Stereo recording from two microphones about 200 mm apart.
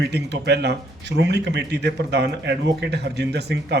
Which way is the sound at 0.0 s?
55° right (ahead or behind).